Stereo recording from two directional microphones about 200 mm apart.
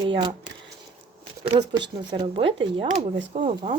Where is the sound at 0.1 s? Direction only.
25° right (ahead or behind).